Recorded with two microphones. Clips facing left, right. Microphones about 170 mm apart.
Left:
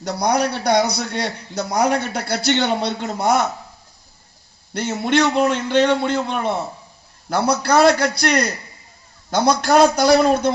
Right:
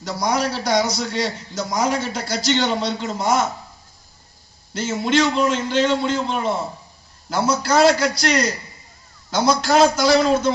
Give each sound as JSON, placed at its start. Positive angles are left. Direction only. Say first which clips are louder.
{"t": 0.0, "sound": "a man's voice", "louder": "left 2 dB", "side_deg": 60}
{"t": 4.7, "sound": "a man's voice", "louder": "left 1 dB", "side_deg": 60}